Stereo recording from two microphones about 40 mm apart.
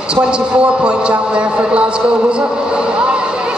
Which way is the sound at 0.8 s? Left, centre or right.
Right.